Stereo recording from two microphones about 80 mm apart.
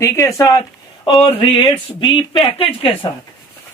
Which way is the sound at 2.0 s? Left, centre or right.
Left.